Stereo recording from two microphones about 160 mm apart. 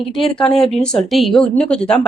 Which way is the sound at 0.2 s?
5° left (ahead or behind).